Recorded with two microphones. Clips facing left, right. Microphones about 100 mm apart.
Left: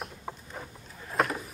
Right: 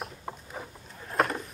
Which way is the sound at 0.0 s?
Centre (ahead or behind).